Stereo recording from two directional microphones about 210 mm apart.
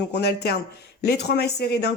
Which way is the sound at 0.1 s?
50° left (ahead or behind).